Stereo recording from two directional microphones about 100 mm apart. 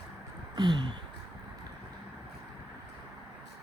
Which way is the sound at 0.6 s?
50° right (ahead or behind).